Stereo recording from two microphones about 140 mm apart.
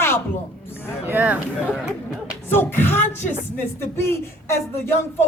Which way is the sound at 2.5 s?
15° left (ahead or behind).